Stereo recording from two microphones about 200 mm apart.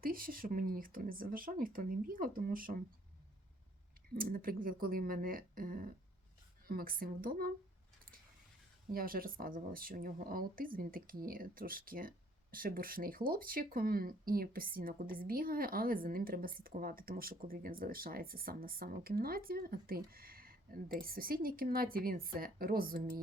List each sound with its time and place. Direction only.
0.0 s speech: 45° right (ahead or behind)
4.1 s speech: 45° right (ahead or behind)
8.9 s speech: 45° right (ahead or behind)